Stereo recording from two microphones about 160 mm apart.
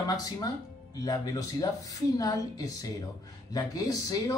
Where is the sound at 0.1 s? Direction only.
25° left (ahead or behind).